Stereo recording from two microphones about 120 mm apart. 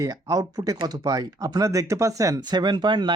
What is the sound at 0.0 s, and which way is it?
Speech, 30° right (ahead or behind).